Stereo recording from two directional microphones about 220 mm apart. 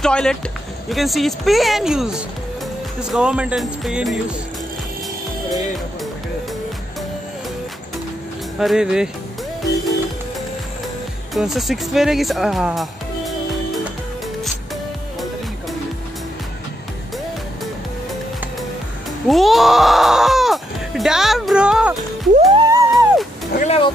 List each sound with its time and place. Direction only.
0.0 s speech: 5° left (ahead or behind)
8.5 s speech: 5° right (ahead or behind)
11.3 s speech: centre (ahead or behind)
19.2 s speech: centre (ahead or behind)
22.7 s music: 15° right (ahead or behind)
23.5 s vehicle: 30° left (ahead or behind)